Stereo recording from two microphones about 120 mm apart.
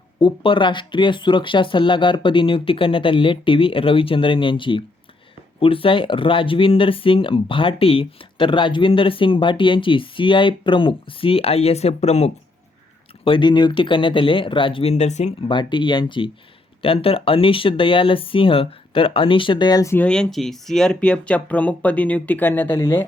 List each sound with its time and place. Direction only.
0.2 s speech: 45° left (ahead or behind); by 12.3 s 60° left (ahead or behind)
13.2 s speech: 45° left (ahead or behind); by 15.3 s 65° left (ahead or behind)
15.4 s speech: 40° left (ahead or behind)
19.8 s speech: 20° left (ahead or behind)
20.1 s speech: 5° left (ahead or behind); by 23.0 s 25° left (ahead or behind)